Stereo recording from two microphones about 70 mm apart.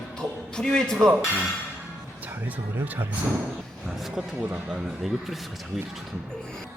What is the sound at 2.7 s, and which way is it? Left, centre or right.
Speech, right.